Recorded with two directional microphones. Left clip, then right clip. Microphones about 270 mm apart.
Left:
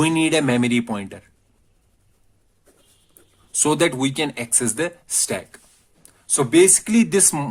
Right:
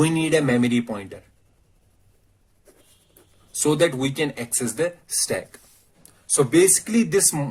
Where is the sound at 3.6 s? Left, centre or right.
Left.